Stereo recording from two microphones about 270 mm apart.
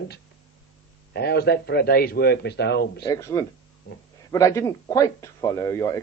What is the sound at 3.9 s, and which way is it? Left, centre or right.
Speech, left.